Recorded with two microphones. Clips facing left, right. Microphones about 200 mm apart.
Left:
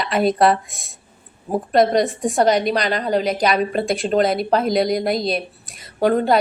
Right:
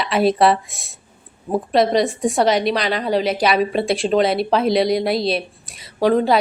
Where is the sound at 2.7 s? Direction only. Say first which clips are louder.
Even; 45° left (ahead or behind).